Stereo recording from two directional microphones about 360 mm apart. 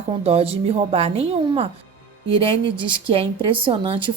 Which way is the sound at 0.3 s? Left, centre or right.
Centre.